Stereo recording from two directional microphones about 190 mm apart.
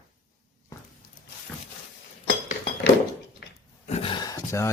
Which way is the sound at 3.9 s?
30° left (ahead or behind).